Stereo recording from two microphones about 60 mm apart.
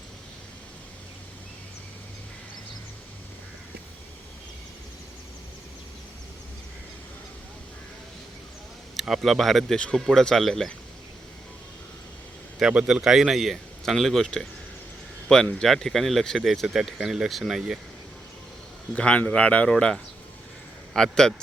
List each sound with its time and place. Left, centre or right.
9.0 s speech: centre
9.7 s a man's voice: centre
10.0 s speech: centre
12.5 s speech: centre
18.9 s speech: centre
19.7 s a man's voice: centre